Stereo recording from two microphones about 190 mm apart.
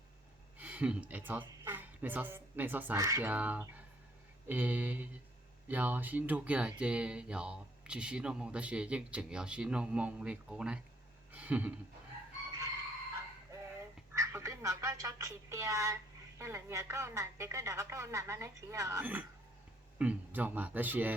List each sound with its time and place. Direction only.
0.6 s a woman's voice: 5° right (ahead or behind)
11.3 s a sound: 10° right (ahead or behind)
14.2 s speech: 15° right (ahead or behind)